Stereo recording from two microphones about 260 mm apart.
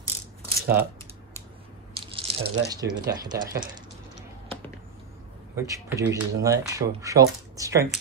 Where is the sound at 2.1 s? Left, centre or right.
Right.